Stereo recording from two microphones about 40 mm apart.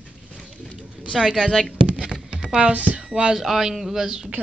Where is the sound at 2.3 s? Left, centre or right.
Centre.